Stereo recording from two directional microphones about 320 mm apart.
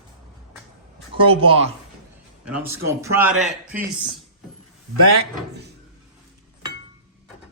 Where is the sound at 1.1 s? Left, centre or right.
Centre.